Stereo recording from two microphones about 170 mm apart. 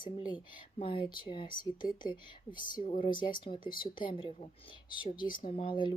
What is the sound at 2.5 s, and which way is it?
Speech, 55° left (ahead or behind).